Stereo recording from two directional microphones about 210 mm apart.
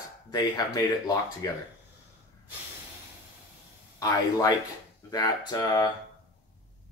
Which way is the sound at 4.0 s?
15° left (ahead or behind).